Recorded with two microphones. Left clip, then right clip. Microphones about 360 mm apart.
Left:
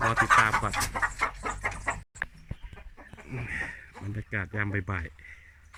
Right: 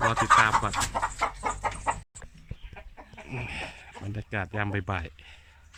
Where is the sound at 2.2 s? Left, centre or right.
Left.